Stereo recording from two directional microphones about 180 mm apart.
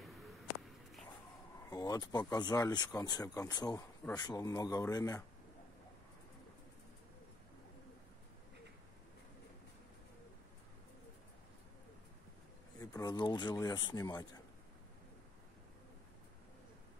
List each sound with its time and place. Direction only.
1.7 s speech: 20° left (ahead or behind)
12.7 s speech: 20° left (ahead or behind)